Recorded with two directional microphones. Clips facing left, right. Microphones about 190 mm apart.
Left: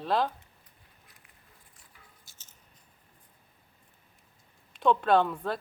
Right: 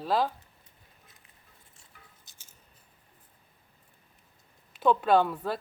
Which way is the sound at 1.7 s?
25° right (ahead or behind).